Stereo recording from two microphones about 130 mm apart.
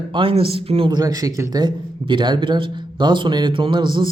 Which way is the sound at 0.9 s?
30° right (ahead or behind).